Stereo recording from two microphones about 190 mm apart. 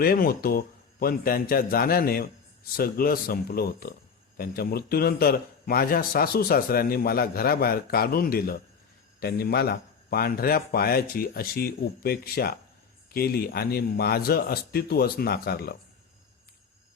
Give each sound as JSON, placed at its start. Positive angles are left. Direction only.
{"t": 0.0, "sound": "a man's voice", "side_deg": 50}